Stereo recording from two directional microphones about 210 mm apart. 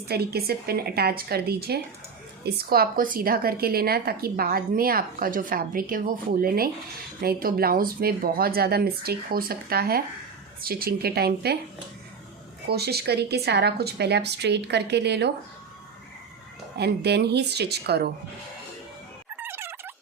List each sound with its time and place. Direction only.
0.1 s a woman's voice: 50° right (ahead or behind)
12.7 s a woman's voice: 50° right (ahead or behind)
16.7 s a woman's voice: 50° right (ahead or behind)
19.4 s a sound: 10° right (ahead or behind)